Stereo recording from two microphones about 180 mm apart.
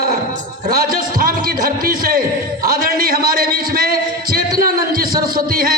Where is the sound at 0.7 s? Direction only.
55° right (ahead or behind).